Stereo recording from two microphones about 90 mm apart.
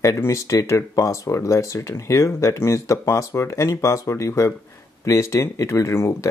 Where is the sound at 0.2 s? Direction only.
35° left (ahead or behind).